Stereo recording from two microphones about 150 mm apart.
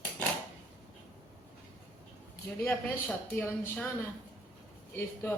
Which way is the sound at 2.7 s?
10° left (ahead or behind).